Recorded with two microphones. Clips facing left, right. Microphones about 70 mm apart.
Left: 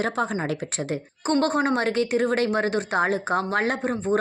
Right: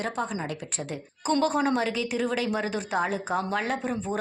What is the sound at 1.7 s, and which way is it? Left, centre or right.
A woman's voice, left.